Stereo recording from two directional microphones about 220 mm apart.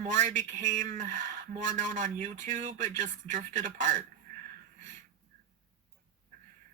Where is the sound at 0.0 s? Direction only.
35° right (ahead or behind).